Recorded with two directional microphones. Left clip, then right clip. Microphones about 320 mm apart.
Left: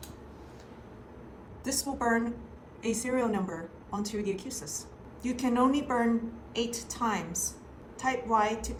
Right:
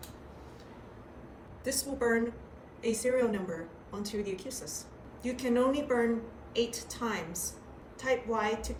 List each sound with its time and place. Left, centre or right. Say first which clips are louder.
1.6 s a woman's voice: left 1 dB; centre